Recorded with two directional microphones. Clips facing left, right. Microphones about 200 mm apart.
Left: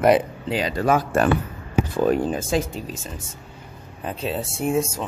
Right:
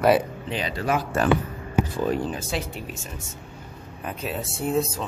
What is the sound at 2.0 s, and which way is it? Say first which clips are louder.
Speech: left 5 dB; 50° left (ahead or behind).